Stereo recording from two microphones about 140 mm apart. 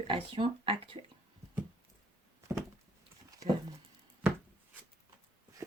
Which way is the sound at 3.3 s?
25° right (ahead or behind).